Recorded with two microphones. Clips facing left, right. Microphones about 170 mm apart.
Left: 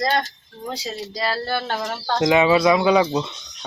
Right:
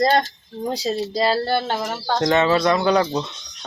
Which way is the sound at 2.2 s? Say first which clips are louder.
Left 2 dB; 10° left (ahead or behind).